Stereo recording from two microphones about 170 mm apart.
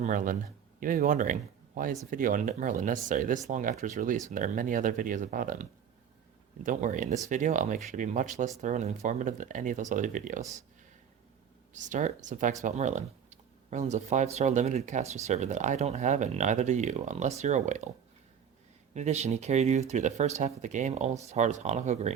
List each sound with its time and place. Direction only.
0.0 s speech: 50° right (ahead or behind)
11.7 s speech: 50° right (ahead or behind)
18.9 s speech: 40° right (ahead or behind)